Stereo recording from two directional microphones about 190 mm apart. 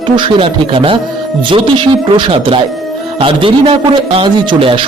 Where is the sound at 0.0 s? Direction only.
25° right (ahead or behind).